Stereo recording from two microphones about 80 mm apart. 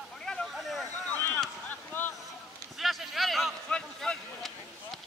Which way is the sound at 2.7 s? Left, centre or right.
Centre.